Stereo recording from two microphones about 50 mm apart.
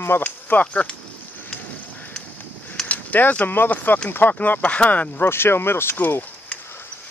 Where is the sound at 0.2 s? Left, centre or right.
Left.